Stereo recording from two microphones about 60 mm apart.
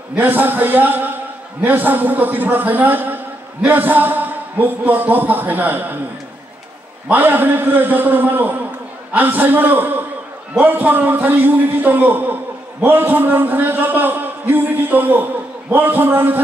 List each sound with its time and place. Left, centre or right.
0.1 s a man's voice: right
7.2 s a man's voice: right